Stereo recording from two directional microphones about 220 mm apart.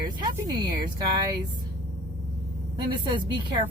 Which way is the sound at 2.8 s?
20° right (ahead or behind).